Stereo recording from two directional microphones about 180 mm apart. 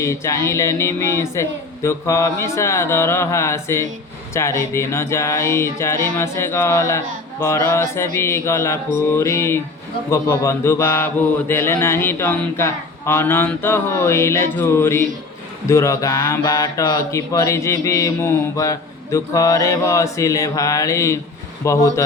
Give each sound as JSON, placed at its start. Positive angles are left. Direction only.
{"t": 0.0, "sound": "mantra", "side_deg": 15}